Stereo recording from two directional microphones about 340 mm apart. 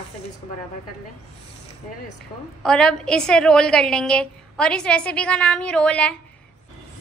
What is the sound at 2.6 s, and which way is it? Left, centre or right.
A woman's voice, centre.